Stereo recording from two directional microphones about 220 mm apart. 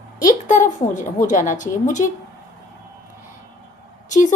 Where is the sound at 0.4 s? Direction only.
35° left (ahead or behind).